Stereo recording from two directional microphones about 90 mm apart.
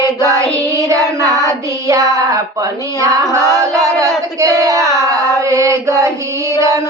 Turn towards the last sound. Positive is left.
turn(degrees=-35)  # may be behind; listen again after turning